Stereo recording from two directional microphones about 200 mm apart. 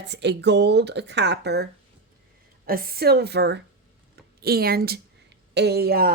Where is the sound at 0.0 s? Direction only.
60° right (ahead or behind).